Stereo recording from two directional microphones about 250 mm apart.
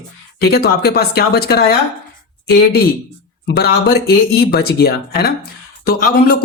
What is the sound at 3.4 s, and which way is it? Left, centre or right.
Speech, left.